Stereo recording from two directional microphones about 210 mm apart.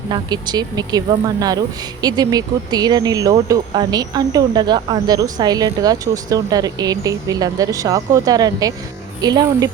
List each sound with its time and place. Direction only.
0.1 s a woman's voice: 20° right (ahead or behind)